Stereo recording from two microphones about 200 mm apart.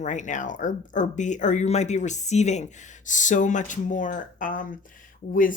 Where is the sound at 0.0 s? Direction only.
40° left (ahead or behind).